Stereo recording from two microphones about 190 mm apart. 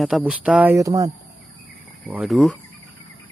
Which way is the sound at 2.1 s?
5° right (ahead or behind).